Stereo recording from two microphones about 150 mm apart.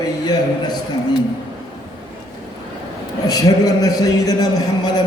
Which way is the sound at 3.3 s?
25° left (ahead or behind).